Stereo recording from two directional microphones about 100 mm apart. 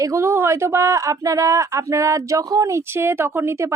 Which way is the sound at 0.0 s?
30° right (ahead or behind).